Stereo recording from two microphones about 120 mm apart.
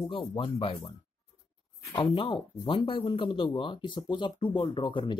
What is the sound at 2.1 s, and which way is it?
Speech, 50° left (ahead or behind).